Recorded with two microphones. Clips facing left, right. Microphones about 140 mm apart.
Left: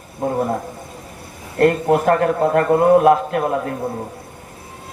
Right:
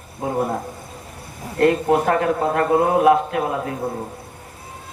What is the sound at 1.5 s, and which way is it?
A man's voice, 50° left (ahead or behind).